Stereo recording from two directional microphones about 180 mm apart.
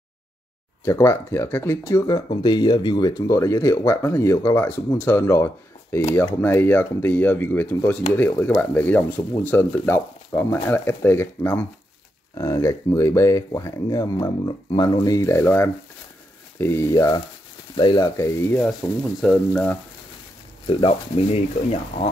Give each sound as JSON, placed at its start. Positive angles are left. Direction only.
{"t": 0.8, "sound": "speech", "side_deg": 15}
{"t": 19.2, "sound": "frying", "side_deg": 5}
{"t": 20.6, "sound": "speech", "side_deg": 30}